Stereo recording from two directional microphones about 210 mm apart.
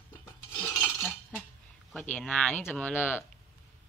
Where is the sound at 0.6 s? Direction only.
10° left (ahead or behind).